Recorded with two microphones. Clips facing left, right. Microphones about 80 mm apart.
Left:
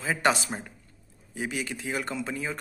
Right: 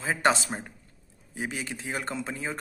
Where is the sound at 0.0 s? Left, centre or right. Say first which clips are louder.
Right 1 dB; right.